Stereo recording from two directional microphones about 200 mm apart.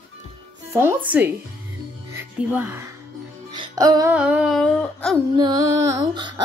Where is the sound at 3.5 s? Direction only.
20° right (ahead or behind).